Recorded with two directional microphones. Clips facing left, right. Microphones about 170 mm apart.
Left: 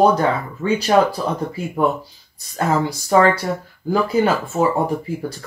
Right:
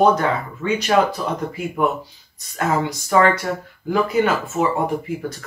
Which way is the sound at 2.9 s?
35° left (ahead or behind).